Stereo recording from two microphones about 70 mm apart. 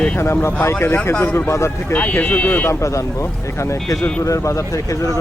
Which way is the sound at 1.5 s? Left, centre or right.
Left.